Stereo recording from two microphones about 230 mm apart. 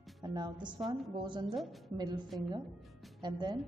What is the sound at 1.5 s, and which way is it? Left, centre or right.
Speech, centre.